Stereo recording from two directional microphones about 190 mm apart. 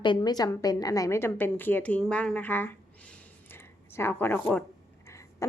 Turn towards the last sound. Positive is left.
turn(degrees=10)  # may be behind; listen again after turning